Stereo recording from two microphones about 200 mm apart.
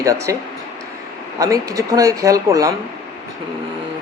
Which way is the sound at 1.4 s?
15° right (ahead or behind).